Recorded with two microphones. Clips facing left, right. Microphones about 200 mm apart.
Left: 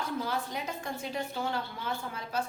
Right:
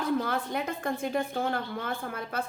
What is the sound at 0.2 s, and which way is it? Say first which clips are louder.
A woman's voice: right 4 dB; 60° right (ahead or behind).